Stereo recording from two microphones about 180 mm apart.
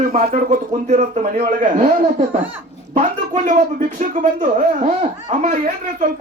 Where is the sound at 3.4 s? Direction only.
45° right (ahead or behind).